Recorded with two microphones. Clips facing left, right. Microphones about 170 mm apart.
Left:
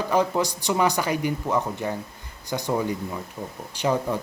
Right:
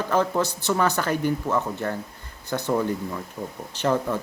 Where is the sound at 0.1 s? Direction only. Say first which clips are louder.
Even; 15° left (ahead or behind).